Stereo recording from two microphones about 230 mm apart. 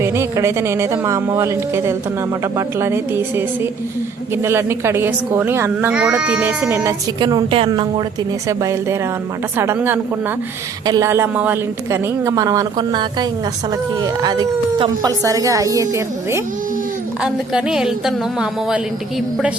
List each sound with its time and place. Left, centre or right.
0.0 s a woman's voice: centre